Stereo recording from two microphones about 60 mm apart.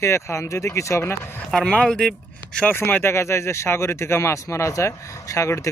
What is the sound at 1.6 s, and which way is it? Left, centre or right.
Speech, centre.